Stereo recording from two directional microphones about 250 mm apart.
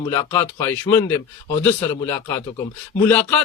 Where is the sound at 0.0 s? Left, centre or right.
Centre.